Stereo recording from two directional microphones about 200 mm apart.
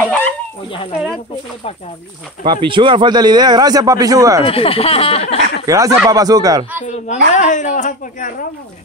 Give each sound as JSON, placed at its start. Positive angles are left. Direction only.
{"t": 0.0, "sound": "a sound", "side_deg": 10}
{"t": 2.4, "sound": "a man's voice", "side_deg": -25}
{"t": 4.5, "sound": "speech", "side_deg": 30}
{"t": 5.7, "sound": "speech", "side_deg": -15}
{"t": 7.1, "sound": "speech", "side_deg": 40}